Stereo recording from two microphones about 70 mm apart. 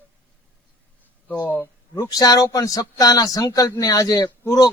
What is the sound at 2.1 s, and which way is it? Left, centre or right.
Speech, left.